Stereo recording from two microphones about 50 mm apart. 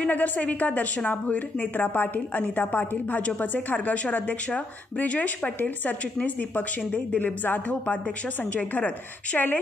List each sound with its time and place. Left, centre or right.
0.0 s a woman's voice: left